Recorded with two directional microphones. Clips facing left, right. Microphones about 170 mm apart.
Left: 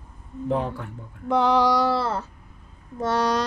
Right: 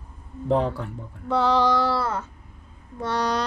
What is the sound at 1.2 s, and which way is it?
Mantra, 15° left (ahead or behind).